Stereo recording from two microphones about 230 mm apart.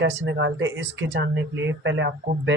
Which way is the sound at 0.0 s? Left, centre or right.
Right.